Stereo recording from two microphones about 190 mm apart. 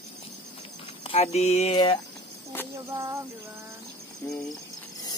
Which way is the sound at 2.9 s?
15° right (ahead or behind).